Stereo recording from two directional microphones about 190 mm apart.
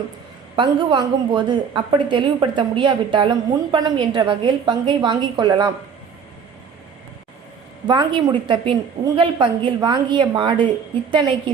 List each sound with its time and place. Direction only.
0.5 s a woman's voice: 25° right (ahead or behind)
7.9 s a woman's voice: 25° right (ahead or behind)